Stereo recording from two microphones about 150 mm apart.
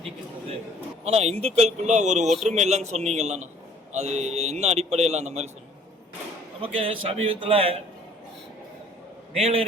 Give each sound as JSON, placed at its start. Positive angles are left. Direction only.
{"t": 1.0, "sound": "a man's voice", "side_deg": -45}
{"t": 2.2, "sound": "speech", "side_deg": 0}
{"t": 2.5, "sound": "a man's voice", "side_deg": -50}
{"t": 6.6, "sound": "a man's voice", "side_deg": -40}
{"t": 9.4, "sound": "a man's voice", "side_deg": -40}